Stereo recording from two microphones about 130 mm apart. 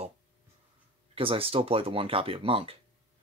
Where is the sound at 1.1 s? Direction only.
45° right (ahead or behind).